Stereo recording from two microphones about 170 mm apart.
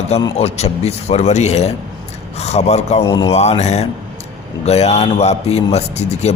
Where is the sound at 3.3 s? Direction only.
40° left (ahead or behind).